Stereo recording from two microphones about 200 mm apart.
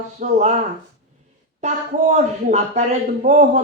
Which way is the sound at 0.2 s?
35° right (ahead or behind).